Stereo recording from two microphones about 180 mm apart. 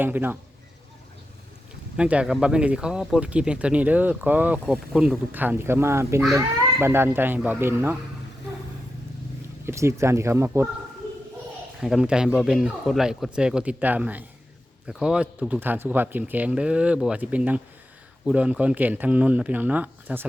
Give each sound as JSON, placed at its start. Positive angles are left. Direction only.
{"t": 0.0, "sound": "speech", "side_deg": -10}
{"t": 2.0, "sound": "speech", "side_deg": -5}
{"t": 9.6, "sound": "speech", "side_deg": -15}
{"t": 11.8, "sound": "speech", "side_deg": -5}